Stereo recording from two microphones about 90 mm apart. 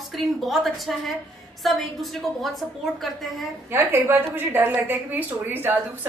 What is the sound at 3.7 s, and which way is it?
A woman's voice, 25° right (ahead or behind).